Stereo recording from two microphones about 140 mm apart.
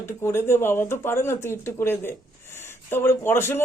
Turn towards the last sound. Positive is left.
turn(degrees=15)  # may be behind; listen again after turning